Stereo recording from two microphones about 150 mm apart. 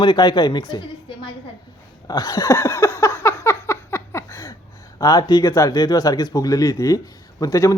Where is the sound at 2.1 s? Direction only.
25° left (ahead or behind).